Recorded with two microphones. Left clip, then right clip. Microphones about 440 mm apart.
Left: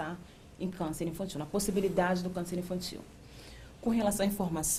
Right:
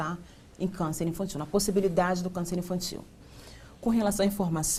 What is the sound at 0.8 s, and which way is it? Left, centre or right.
A woman's voice, right.